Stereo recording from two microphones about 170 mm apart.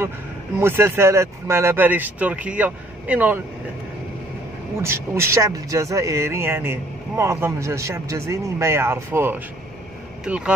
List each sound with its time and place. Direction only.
0.6 s speech: 15° right (ahead or behind)
4.7 s speech: 15° right (ahead or behind)